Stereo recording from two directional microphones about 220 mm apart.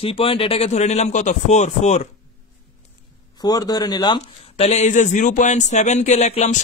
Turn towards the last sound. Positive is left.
turn(degrees=30)  # may be behind; listen again after turning